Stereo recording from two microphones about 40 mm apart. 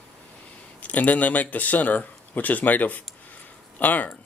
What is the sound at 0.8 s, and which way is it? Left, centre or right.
Speech, left.